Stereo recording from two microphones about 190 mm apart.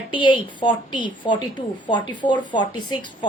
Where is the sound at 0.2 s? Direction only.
25° left (ahead or behind).